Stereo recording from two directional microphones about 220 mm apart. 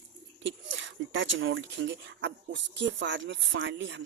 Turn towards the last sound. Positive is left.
turn(degrees=-55)  # may be behind; listen again after turning